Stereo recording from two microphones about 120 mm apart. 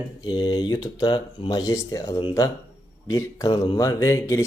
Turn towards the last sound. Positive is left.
turn(degrees=25)  # may be behind; listen again after turning